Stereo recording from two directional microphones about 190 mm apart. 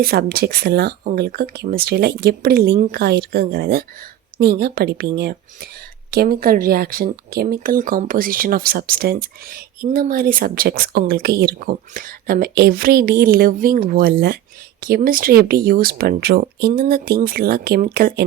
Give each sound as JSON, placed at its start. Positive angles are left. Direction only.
{"t": 0.0, "sound": "speech", "side_deg": -50}